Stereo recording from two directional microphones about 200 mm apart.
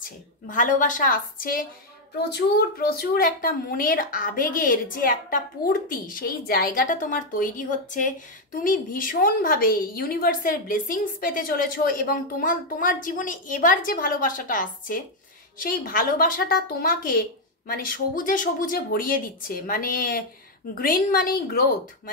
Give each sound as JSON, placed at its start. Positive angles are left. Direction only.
{"t": 0.0, "sound": "a woman's voice", "side_deg": 40}